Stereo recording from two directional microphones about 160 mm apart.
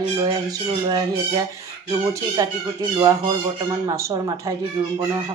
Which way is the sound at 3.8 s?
25° right (ahead or behind).